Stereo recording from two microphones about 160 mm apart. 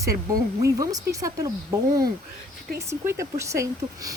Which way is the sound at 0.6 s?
20° right (ahead or behind).